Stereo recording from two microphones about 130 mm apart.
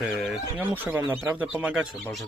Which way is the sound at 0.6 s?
15° right (ahead or behind).